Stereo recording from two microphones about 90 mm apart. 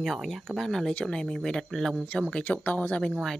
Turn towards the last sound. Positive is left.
turn(degrees=15)  # may be behind; listen again after turning